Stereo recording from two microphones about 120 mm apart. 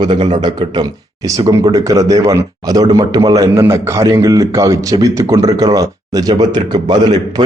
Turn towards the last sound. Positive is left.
turn(degrees=-40)  # may be behind; listen again after turning